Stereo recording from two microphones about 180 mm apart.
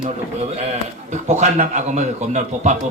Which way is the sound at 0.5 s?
40° right (ahead or behind).